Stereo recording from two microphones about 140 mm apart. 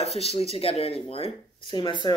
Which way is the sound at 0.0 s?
45° left (ahead or behind).